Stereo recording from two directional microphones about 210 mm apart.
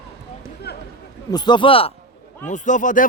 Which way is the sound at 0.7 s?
50° left (ahead or behind).